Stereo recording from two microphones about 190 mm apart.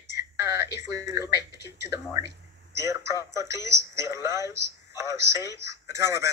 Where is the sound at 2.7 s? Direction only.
15° right (ahead or behind).